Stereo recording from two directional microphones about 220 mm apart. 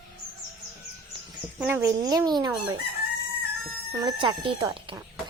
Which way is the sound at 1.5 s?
10° right (ahead or behind).